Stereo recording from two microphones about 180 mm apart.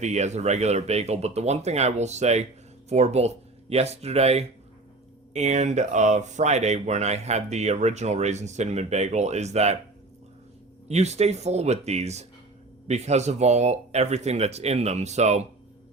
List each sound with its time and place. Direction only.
0.0 s speech: 40° right (ahead or behind)
10.8 s speech: 35° right (ahead or behind)